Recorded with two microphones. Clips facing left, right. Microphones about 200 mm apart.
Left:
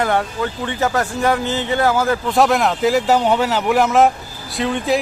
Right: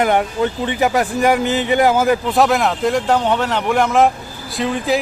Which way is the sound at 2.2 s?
Centre (ahead or behind).